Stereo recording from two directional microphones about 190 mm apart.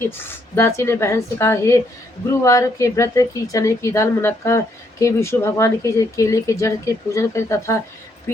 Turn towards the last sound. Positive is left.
turn(degrees=15)  # may be behind; listen again after turning